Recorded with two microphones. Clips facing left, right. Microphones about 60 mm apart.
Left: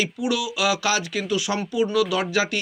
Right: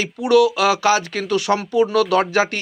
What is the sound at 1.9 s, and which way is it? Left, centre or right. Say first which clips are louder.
Speech: right 5 dB; right.